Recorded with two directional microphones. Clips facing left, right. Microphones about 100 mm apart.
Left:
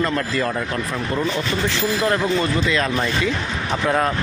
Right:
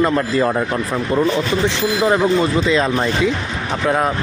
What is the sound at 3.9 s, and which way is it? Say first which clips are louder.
Speech: right 2 dB; 10° right (ahead or behind).